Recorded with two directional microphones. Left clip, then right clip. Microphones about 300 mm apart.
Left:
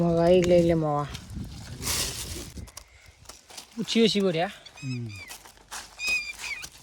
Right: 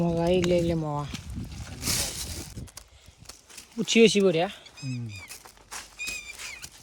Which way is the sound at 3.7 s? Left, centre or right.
Centre.